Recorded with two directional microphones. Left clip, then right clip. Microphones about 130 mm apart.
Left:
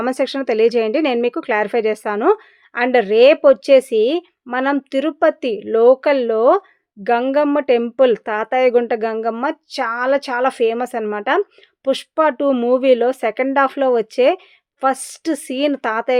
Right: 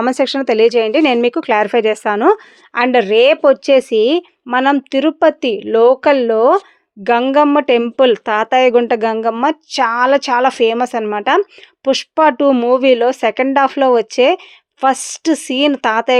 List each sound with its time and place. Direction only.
0.0 s speech: 30° right (ahead or behind)